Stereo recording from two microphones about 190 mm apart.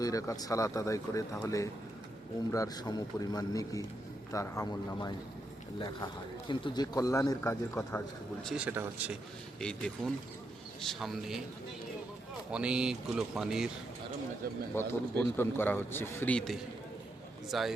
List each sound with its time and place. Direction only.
0.0 s a man's voice: 15° left (ahead or behind)
6.5 s a man's voice: 25° left (ahead or behind)
8.4 s speech: 5° right (ahead or behind)
9.6 s speech: 5° left (ahead or behind)
12.5 s speech: 5° right (ahead or behind)
14.8 s a man's voice: 10° left (ahead or behind)